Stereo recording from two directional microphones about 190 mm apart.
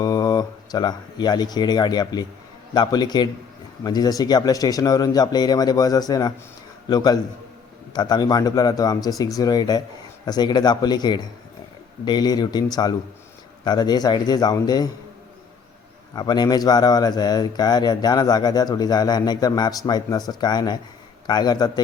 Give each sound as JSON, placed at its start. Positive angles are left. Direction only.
{"t": 0.0, "sound": "speech", "side_deg": 20}
{"t": 16.1, "sound": "speech", "side_deg": 20}